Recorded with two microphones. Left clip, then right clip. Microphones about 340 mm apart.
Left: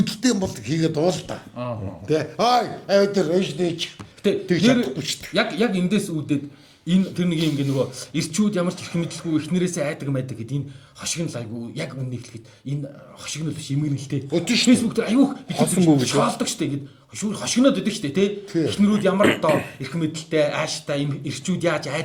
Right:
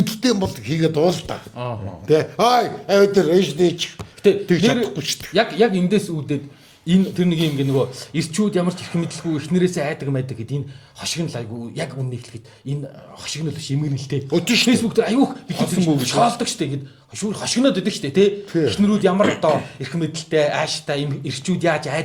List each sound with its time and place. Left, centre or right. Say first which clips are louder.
0.0 s speech: right 3 dB; right
13.2 s speech: right 3 dB; right